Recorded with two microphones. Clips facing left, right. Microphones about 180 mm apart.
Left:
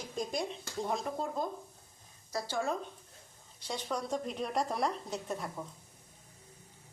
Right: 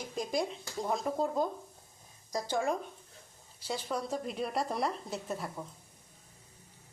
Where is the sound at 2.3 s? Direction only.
15° right (ahead or behind).